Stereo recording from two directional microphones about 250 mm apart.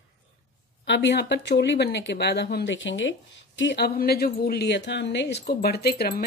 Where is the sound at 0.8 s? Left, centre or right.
Left.